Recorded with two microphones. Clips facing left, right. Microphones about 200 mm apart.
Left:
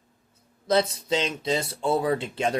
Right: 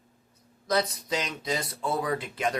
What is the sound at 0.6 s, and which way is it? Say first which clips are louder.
Speech: left 4 dB; 25° left (ahead or behind).